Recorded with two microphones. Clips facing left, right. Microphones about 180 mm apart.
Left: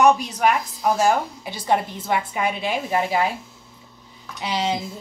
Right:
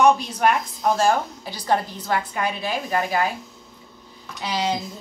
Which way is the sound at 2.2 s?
5° left (ahead or behind).